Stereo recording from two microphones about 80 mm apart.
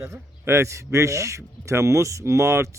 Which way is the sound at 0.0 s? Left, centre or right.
Right.